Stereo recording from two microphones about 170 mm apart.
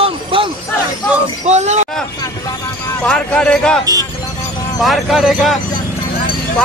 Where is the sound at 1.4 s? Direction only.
40° right (ahead or behind).